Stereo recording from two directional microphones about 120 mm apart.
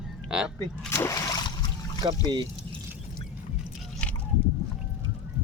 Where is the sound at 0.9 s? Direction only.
25° left (ahead or behind).